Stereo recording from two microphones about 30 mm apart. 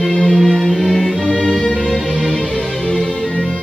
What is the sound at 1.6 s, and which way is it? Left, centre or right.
Music, centre.